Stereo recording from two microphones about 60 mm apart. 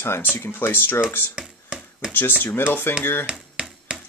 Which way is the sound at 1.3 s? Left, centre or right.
Centre.